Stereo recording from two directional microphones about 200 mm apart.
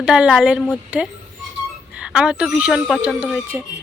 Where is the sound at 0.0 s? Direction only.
5° right (ahead or behind).